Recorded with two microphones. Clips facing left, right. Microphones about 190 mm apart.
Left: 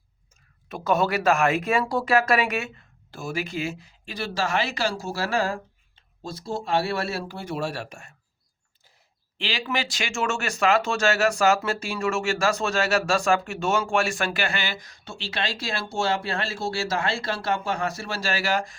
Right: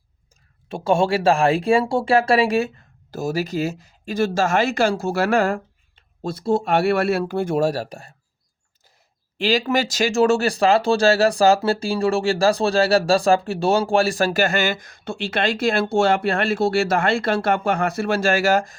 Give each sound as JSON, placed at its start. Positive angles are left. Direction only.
{"t": 0.7, "sound": "speech", "side_deg": -30}
{"t": 9.4, "sound": "speech", "side_deg": -40}